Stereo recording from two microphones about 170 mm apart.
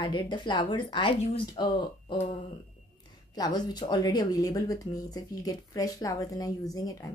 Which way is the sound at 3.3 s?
25° left (ahead or behind).